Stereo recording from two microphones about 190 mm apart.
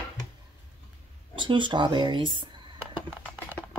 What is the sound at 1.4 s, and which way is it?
Speech, 25° right (ahead or behind).